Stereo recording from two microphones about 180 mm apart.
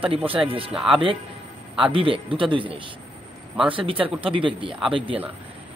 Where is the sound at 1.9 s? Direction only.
30° right (ahead or behind).